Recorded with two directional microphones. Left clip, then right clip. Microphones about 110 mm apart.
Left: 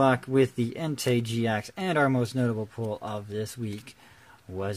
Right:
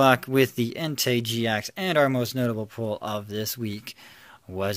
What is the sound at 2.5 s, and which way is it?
Speech, 35° right (ahead or behind).